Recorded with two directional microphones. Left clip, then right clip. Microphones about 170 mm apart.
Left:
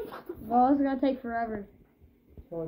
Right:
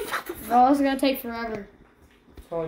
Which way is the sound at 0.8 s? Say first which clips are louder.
Right 5 dB; 70° right (ahead or behind).